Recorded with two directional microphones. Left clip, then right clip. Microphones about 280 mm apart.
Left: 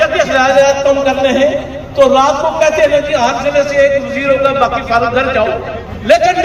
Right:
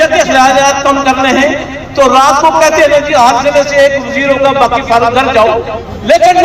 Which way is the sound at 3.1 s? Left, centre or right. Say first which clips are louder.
Right 6 dB; right.